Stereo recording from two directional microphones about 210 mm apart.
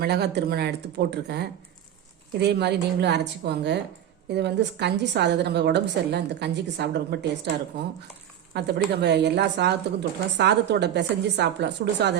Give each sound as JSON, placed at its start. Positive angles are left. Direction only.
{"t": 0.0, "sound": "a woman's voice", "side_deg": -50}